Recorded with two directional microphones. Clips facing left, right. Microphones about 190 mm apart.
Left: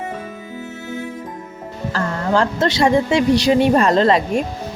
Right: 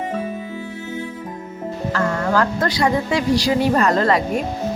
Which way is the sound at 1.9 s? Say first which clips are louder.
Left 1 dB; 25° left (ahead or behind).